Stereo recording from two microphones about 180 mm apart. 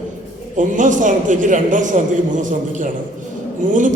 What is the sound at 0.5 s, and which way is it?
A man's voice, 45° right (ahead or behind).